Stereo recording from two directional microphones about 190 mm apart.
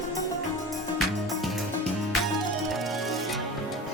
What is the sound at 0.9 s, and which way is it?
Music, centre (ahead or behind).